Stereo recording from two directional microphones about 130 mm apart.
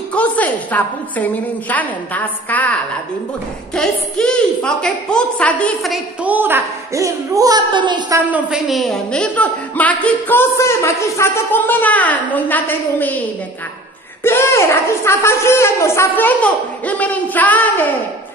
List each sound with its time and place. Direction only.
0.1 s a man's voice: 10° left (ahead or behind)
6.2 s speech: 15° right (ahead or behind); by 8.0 s 35° right (ahead or behind)
8.3 s a man's voice: 10° right (ahead or behind); by 13.2 s 15° left (ahead or behind)
14.2 s a man's voice: 20° left (ahead or behind)